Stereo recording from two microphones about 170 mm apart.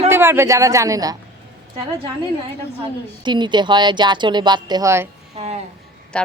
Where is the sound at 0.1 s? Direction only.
15° right (ahead or behind).